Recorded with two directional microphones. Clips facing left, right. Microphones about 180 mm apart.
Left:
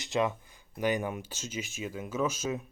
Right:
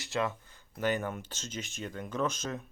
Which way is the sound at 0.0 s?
15° left (ahead or behind).